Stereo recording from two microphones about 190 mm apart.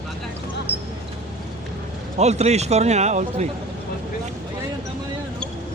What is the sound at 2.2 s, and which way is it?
A man's voice, 35° right (ahead or behind).